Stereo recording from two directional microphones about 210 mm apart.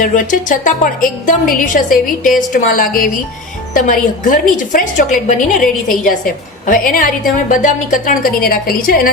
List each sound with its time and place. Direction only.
0.0 s a woman's voice: 40° left (ahead or behind)